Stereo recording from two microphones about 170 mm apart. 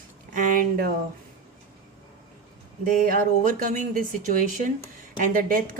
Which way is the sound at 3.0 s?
55° right (ahead or behind).